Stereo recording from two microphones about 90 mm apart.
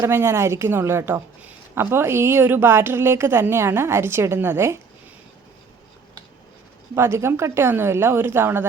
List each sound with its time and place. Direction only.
0.1 s a woman's voice: 25° right (ahead or behind)
6.9 s a woman's voice: 30° right (ahead or behind)